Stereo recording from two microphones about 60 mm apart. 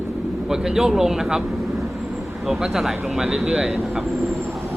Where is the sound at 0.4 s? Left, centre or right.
Centre.